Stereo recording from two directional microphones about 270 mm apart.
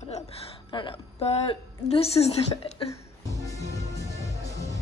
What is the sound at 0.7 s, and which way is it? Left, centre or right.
A woman's voice, centre.